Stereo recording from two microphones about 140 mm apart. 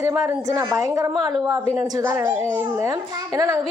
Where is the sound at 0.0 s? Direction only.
15° right (ahead or behind).